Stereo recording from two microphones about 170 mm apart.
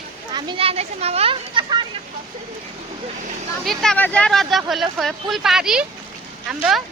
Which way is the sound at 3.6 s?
5° left (ahead or behind).